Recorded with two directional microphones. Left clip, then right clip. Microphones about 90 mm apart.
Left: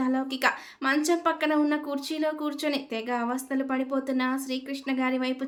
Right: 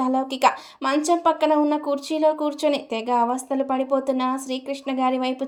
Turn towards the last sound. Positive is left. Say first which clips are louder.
# right 5 dB
turn(degrees=-35)  # may be behind; listen again after turning